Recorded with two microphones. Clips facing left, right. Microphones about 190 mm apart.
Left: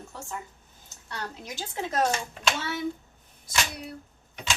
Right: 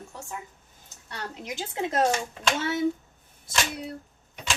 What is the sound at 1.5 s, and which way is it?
Speech, 20° right (ahead or behind).